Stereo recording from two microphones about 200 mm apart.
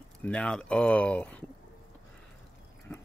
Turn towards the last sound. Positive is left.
turn(degrees=10)  # may be behind; listen again after turning